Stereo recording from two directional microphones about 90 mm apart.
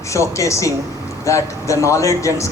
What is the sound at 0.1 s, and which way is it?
Speech, 35° left (ahead or behind).